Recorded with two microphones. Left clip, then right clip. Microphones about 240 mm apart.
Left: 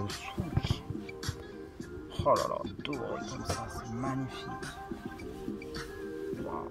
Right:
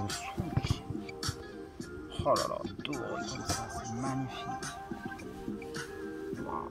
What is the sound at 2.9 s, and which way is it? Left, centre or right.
Speech, right.